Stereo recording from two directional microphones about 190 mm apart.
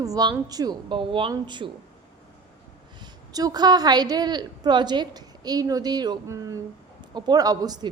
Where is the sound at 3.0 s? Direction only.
20° right (ahead or behind).